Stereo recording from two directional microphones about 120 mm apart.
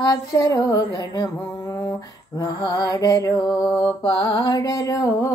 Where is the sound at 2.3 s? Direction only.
35° left (ahead or behind).